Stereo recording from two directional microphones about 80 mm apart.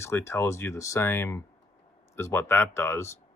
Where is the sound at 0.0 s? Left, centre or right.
Left.